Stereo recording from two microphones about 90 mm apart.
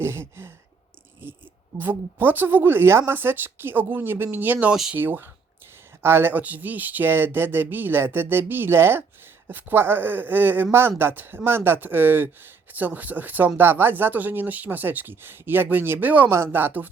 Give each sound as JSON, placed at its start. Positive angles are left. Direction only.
{"t": 0.0, "sound": "a sound", "side_deg": -30}
{"t": 1.2, "sound": "speech", "side_deg": -25}
{"t": 4.7, "sound": "speech", "side_deg": -10}
{"t": 4.9, "sound": "speech", "side_deg": -25}